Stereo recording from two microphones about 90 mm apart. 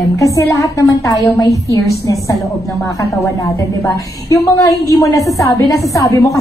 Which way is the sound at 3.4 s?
35° left (ahead or behind).